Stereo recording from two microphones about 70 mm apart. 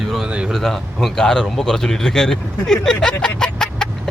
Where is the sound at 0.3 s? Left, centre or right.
Centre.